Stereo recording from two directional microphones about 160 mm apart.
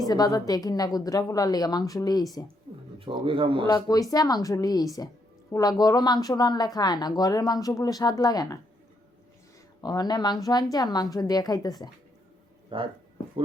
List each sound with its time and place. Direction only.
0.0 s a woman's voice: 25° left (ahead or behind)
2.7 s a sound: 25° right (ahead or behind)
3.0 s a man's voice: 35° right (ahead or behind)
3.7 s a woman's voice: 20° left (ahead or behind)
9.8 s a woman's voice: 25° left (ahead or behind)
12.7 s a man's voice: 30° right (ahead or behind)